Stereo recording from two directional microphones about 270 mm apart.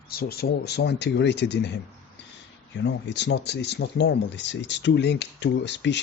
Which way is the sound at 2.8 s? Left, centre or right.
Left.